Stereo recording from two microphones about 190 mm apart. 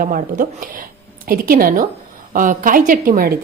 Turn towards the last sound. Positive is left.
turn(degrees=-50)  # may be behind; listen again after turning